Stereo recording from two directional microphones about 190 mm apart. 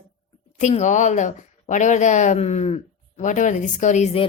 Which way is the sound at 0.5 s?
40° left (ahead or behind).